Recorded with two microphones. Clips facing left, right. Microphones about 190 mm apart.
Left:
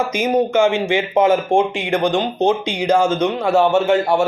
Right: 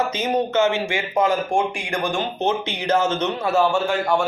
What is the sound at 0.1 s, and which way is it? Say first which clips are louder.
Speech: left 5 dB; 15° left (ahead or behind).